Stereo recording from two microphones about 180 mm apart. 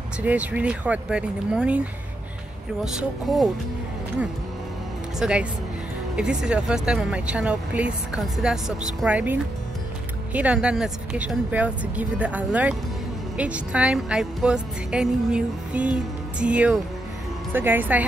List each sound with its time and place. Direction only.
0.2 s speech: 10° right (ahead or behind)
2.8 s speech: 5° right (ahead or behind)
5.2 s speech: 5° right (ahead or behind)